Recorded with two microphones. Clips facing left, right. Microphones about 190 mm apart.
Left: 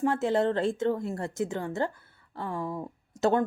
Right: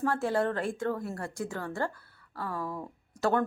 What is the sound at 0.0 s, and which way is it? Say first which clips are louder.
Speech: left 3 dB; 20° left (ahead or behind).